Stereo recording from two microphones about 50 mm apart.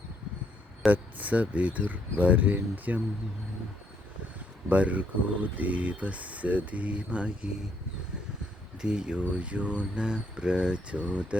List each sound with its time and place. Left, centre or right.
0.9 s speech: right
4.7 s speech: right
8.8 s speech: centre